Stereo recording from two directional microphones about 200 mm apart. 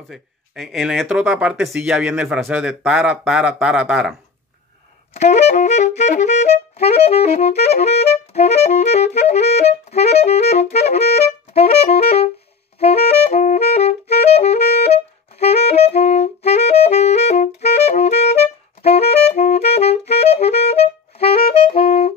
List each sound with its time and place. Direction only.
0.1 s speech: centre (ahead or behind)
5.1 s saxophone: 35° left (ahead or behind)